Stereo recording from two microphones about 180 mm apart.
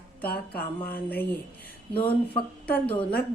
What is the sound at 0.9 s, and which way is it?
Speech, 10° left (ahead or behind).